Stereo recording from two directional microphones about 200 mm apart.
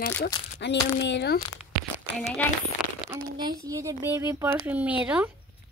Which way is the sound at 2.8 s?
5° right (ahead or behind).